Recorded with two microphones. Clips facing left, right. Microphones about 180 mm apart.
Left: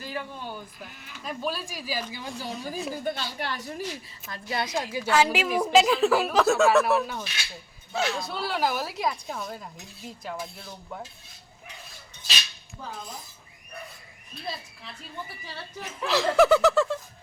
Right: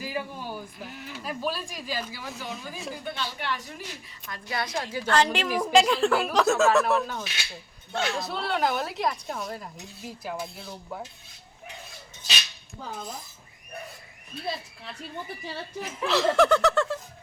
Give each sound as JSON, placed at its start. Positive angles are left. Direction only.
{"t": 0.0, "sound": "speech", "side_deg": -10}
{"t": 2.4, "sound": "speech", "side_deg": 35}
{"t": 4.3, "sound": "a woman's voice", "side_deg": 25}
{"t": 4.8, "sound": "speech", "side_deg": 10}
{"t": 15.8, "sound": "speech", "side_deg": 0}